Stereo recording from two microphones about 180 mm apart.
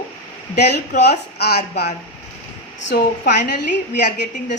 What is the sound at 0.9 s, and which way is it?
A woman's voice, 60° left (ahead or behind).